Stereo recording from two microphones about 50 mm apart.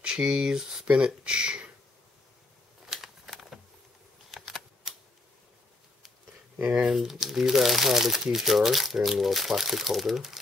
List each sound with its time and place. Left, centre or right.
0.0 s speech: centre
2.9 s a sound: centre
4.3 s typing: centre
6.9 s speech: centre